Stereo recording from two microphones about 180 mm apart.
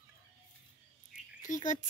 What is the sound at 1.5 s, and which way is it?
Bird, 45° left (ahead or behind).